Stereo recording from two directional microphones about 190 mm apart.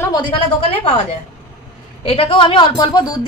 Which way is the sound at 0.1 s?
25° left (ahead or behind).